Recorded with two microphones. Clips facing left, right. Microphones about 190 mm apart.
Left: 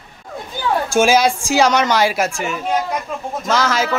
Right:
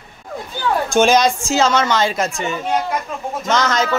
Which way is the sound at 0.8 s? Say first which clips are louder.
Even; 5° left (ahead or behind).